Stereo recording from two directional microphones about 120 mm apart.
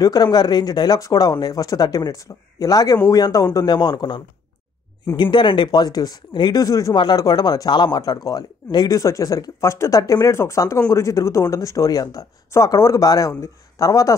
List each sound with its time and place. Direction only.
0.0 s speech: 30° left (ahead or behind)